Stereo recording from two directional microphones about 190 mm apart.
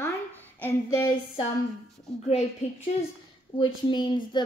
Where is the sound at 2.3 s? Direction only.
35° left (ahead or behind).